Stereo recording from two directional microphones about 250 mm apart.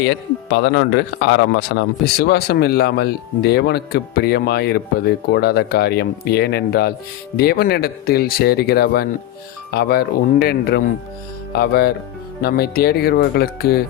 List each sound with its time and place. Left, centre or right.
0.0 s speech: left